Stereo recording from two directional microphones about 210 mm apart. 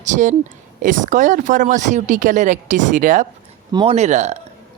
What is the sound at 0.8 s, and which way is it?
Speech, 40° right (ahead or behind).